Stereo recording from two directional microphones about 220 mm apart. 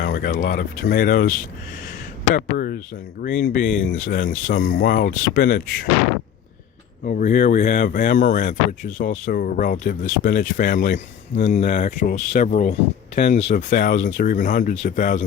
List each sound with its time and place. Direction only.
0.0 s speech: 40° left (ahead or behind)
2.3 s speech: 40° left (ahead or behind)
7.0 s speech: 40° left (ahead or behind)